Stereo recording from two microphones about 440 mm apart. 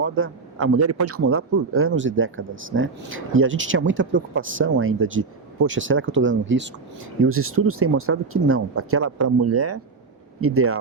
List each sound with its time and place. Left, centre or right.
0.0 s a man's voice: right